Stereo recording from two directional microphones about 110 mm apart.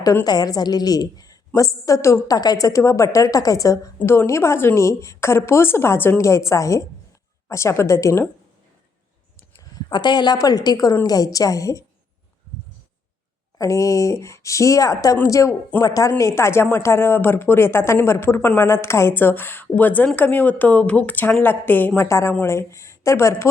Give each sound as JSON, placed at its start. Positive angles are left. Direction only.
{"t": 0.3, "sound": "a woman's voice", "side_deg": 35}
{"t": 3.9, "sound": "speech", "side_deg": 20}
{"t": 9.5, "sound": "a woman's voice", "side_deg": 35}
{"t": 13.6, "sound": "a woman's voice", "side_deg": 30}